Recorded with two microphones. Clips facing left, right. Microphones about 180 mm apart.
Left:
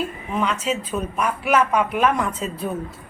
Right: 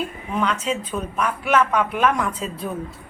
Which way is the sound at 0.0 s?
5° left (ahead or behind).